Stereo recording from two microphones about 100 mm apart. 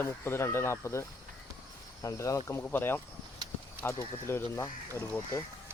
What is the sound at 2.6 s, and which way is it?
Speech, 20° left (ahead or behind).